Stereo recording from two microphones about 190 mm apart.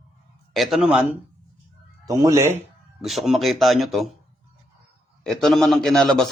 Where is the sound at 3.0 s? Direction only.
Centre (ahead or behind).